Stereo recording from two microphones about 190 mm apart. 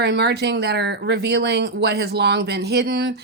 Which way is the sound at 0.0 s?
60° right (ahead or behind).